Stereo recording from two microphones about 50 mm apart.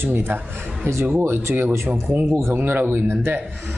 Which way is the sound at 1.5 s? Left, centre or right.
Right.